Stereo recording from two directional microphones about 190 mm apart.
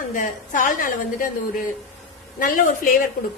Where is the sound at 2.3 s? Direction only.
45° left (ahead or behind).